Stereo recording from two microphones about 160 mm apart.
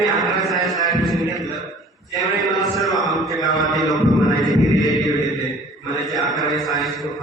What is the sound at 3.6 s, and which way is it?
Speech, centre (ahead or behind).